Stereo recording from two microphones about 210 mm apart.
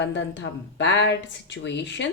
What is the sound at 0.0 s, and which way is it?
Speech, 60° left (ahead or behind).